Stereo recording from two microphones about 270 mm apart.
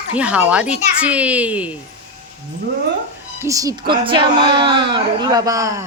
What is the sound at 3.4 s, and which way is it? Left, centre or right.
Speech, centre.